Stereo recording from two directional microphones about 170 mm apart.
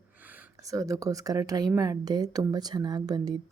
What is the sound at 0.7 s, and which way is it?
A woman's voice, 20° right (ahead or behind).